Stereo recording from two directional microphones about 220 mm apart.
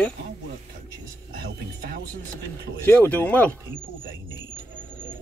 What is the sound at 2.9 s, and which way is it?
Speech, 10° left (ahead or behind).